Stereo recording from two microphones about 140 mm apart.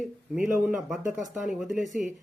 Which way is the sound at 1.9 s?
65° right (ahead or behind).